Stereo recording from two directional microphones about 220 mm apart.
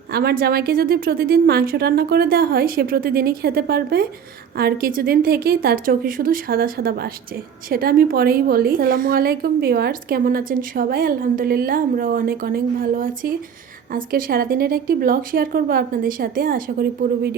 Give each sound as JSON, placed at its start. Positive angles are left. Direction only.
{"t": 0.1, "sound": "a woman's voice", "side_deg": -45}